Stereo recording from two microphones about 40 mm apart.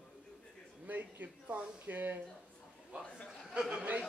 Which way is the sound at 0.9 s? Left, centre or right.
Right.